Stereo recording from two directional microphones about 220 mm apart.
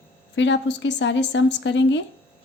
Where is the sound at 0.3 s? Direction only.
55° left (ahead or behind).